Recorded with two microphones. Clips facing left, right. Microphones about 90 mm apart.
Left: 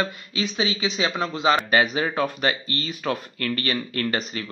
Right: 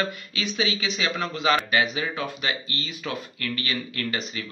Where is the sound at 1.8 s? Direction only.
40° left (ahead or behind).